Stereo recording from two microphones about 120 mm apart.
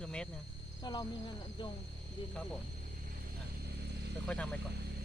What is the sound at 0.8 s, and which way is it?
Speech, 35° left (ahead or behind).